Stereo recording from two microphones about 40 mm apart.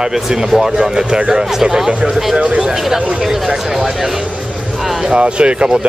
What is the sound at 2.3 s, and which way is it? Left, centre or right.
Speech, right.